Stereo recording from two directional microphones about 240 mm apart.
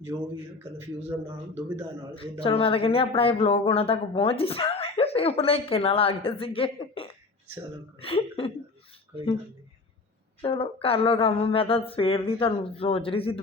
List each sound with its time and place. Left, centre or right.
0.1 s a man's voice: centre
2.4 s speech: left
10.4 s speech: left